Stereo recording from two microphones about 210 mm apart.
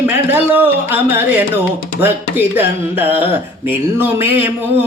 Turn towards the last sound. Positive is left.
turn(degrees=-10)  # may be behind; listen again after turning